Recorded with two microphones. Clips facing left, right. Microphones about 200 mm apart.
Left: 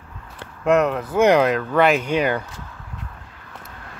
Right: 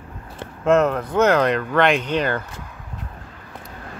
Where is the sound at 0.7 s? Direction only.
Centre (ahead or behind).